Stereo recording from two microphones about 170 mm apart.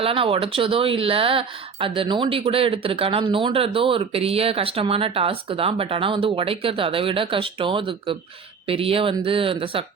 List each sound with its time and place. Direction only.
0.0 s speech: 35° right (ahead or behind)